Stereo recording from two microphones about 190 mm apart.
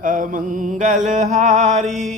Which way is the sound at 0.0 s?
45° right (ahead or behind).